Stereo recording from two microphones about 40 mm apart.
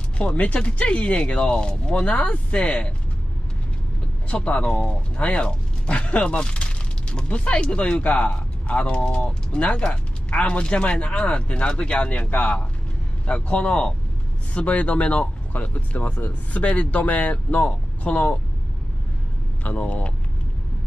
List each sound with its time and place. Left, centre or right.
0.2 s speech: left
2.1 s speech: left
4.3 s speech: left
12.1 s speech: left
19.6 s speech: left